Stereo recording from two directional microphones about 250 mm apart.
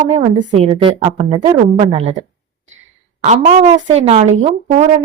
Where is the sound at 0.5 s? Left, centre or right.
Right.